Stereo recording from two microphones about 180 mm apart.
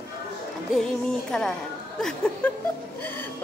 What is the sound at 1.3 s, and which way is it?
Speech, 5° left (ahead or behind).